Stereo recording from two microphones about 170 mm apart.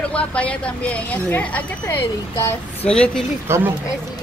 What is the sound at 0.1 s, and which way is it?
A woman's voice, 5° left (ahead or behind).